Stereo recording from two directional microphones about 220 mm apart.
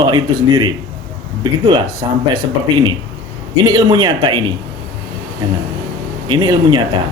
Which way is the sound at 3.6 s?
20° right (ahead or behind).